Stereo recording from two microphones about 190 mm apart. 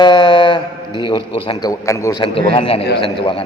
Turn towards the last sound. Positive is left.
turn(degrees=30)  # may be behind; listen again after turning